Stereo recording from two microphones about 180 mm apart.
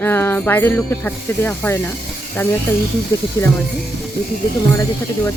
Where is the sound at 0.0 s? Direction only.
10° left (ahead or behind).